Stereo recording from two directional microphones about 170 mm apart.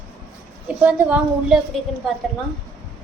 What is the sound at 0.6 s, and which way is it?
Speech, 10° right (ahead or behind).